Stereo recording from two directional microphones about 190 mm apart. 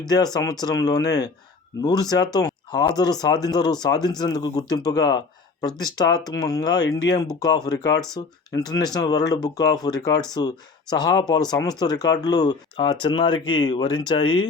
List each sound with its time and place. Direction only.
0.6 s speech: 20° left (ahead or behind)